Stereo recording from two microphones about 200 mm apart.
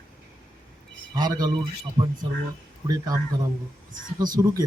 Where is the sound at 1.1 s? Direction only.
20° right (ahead or behind).